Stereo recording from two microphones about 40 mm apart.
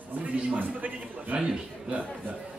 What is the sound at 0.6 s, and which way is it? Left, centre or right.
Speech, right.